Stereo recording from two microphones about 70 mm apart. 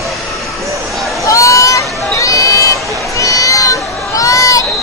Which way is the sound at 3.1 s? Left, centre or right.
Left.